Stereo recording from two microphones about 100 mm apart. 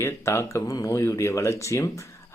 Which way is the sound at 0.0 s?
25° left (ahead or behind).